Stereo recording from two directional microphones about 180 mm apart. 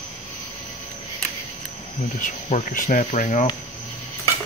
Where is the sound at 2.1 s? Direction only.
45° left (ahead or behind).